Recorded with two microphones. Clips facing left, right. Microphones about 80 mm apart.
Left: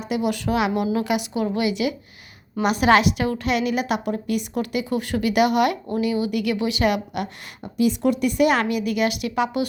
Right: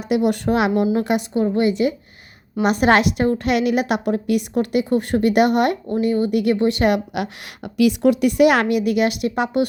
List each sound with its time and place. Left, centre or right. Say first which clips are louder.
0.3 s a woman's voice: right 4 dB; right